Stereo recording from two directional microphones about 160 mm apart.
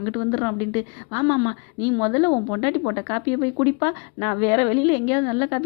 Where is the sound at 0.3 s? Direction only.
25° left (ahead or behind).